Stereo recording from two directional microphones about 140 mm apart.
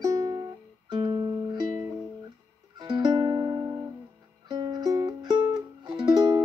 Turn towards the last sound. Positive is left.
turn(degrees=-30)  # may be behind; listen again after turning